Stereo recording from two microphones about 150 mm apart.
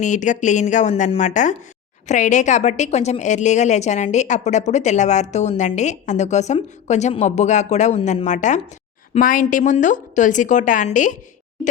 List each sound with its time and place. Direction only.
0.0 s a woman's voice: 55° left (ahead or behind)
9.1 s speech: 65° left (ahead or behind)